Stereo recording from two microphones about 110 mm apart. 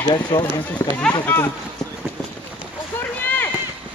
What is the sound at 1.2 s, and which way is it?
Speech, 20° left (ahead or behind).